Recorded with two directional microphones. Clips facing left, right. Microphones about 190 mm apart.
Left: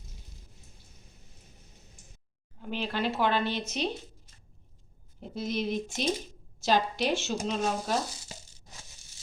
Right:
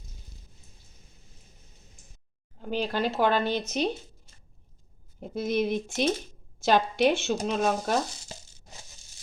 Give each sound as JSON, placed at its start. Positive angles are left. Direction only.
{"t": 2.6, "sound": "speech", "side_deg": -40}
{"t": 5.2, "sound": "speech", "side_deg": -55}